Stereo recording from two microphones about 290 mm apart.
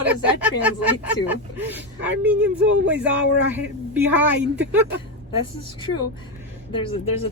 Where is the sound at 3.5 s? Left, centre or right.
Centre.